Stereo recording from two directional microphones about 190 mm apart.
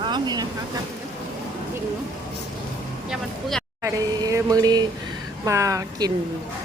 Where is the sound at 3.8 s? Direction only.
15° right (ahead or behind).